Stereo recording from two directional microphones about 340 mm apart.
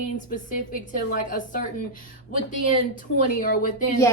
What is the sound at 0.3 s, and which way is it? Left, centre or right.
Speech, left.